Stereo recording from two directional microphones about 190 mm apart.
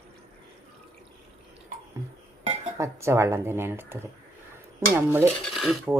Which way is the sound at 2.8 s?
15° right (ahead or behind).